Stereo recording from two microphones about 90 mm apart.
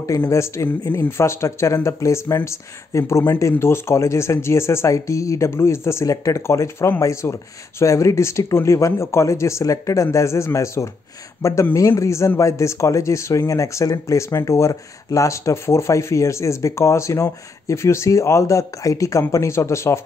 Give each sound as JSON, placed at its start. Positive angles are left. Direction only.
{"t": 0.2, "sound": "speech", "side_deg": 30}